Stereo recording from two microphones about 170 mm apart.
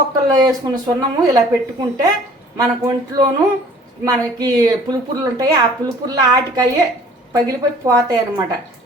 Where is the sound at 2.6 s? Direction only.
20° right (ahead or behind).